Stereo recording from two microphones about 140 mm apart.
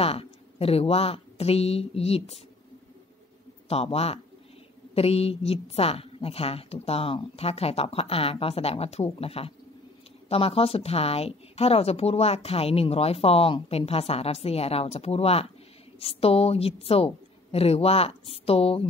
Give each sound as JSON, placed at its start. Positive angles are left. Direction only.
{"t": 0.0, "sound": "a woman's voice", "side_deg": 45}
{"t": 3.6, "sound": "a woman's voice", "side_deg": 45}